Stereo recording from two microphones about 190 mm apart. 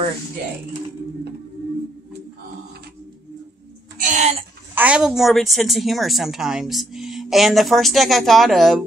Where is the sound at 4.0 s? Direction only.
40° right (ahead or behind).